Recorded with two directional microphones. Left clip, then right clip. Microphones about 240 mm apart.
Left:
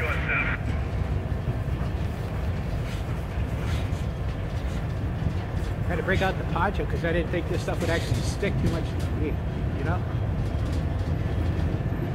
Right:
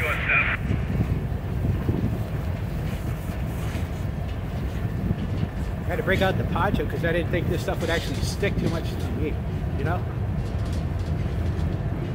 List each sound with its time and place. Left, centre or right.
0.0 s vehicle: right
6.0 s speech: centre